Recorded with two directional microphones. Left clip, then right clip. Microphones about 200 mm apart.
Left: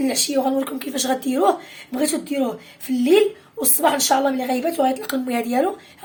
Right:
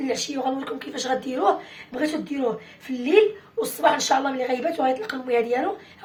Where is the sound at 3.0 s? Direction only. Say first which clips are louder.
Left 1 dB; 55° left (ahead or behind).